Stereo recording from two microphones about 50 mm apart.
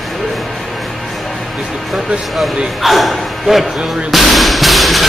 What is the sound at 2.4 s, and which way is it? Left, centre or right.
Speech, centre.